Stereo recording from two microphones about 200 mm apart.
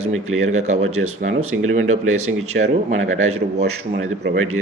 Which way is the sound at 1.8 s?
90° right.